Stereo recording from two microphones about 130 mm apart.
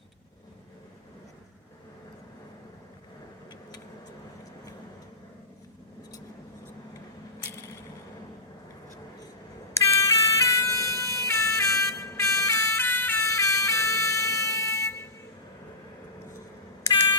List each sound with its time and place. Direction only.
9.7 s siren: 20° left (ahead or behind)